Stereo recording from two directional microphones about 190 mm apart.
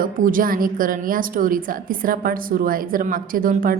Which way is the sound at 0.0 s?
45° right (ahead or behind).